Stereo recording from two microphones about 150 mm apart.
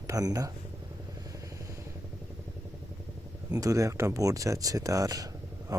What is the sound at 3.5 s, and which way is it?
Speech, 20° right (ahead or behind).